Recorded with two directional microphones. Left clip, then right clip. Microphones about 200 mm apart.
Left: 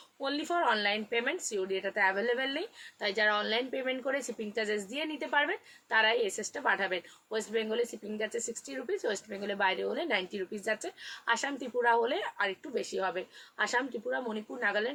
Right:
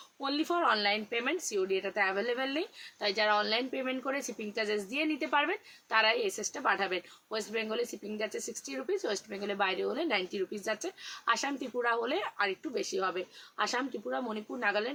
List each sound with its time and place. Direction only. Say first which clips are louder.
0.2 s speech: right 1 dB; 20° right (ahead or behind)